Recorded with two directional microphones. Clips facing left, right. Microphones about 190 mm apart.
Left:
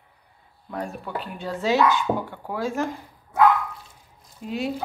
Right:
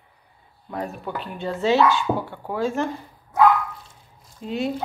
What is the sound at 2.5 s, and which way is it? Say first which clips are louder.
Speech: right 4 dB; 10° left (ahead or behind).